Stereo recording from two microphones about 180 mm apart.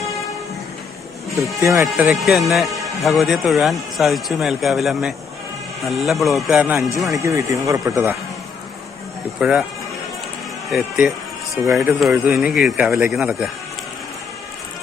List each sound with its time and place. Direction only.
1.6 s speech: 15° right (ahead or behind)
2.0 s speech: centre (ahead or behind)
7.1 s speech: 20° right (ahead or behind)
9.4 s speech: 5° right (ahead or behind)
10.7 s speech: centre (ahead or behind)
11.6 s speech: 15° right (ahead or behind)
11.9 s speech: centre (ahead or behind)
12.9 s speech: 15° right (ahead or behind)
13.1 s speech: centre (ahead or behind)